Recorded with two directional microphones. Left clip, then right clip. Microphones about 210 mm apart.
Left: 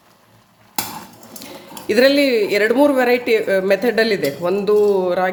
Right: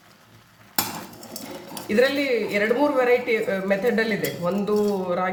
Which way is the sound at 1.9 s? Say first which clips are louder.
Left 7 dB; 50° left (ahead or behind).